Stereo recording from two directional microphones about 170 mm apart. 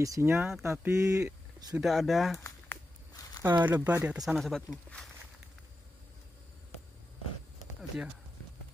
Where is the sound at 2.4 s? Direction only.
20° left (ahead or behind).